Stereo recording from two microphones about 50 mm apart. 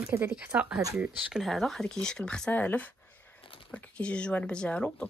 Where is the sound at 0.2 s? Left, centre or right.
Right.